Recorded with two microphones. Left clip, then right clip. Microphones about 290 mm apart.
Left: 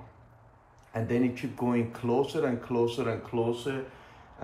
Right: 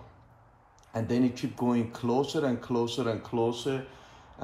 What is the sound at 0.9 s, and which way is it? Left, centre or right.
Speech, centre.